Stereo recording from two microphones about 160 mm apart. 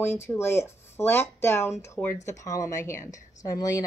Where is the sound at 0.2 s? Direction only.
15° left (ahead or behind).